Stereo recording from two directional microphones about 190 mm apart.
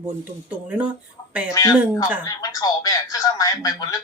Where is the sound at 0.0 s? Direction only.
10° right (ahead or behind).